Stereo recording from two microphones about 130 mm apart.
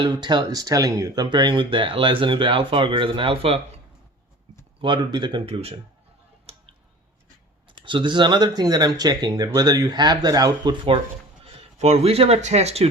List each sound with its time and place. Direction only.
0.0 s speech: 35° right (ahead or behind)
4.8 s speech: 35° right (ahead or behind)
5.5 s a man's voice: 50° right (ahead or behind)
6.4 s tick: 50° right (ahead or behind)
7.8 s speech: 40° right (ahead or behind)
11.4 s speech: 55° right (ahead or behind)